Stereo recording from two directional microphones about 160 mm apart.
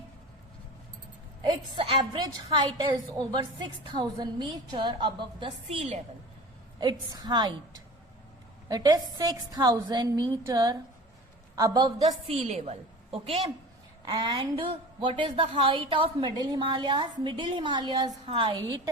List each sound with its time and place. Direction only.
1.5 s a woman's voice: 30° right (ahead or behind)
6.7 s a woman's voice: 25° right (ahead or behind)
8.7 s a woman's voice: 25° right (ahead or behind)
12.0 s a woman's voice: 40° right (ahead or behind)
14.2 s a woman's voice: 25° right (ahead or behind)